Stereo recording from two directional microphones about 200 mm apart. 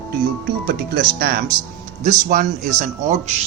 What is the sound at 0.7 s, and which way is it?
Speech, 55° right (ahead or behind).